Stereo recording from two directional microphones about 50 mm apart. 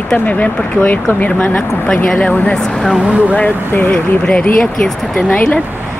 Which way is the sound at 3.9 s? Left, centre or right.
Centre.